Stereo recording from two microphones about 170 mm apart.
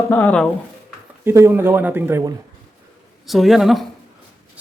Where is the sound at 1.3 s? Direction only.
15° right (ahead or behind).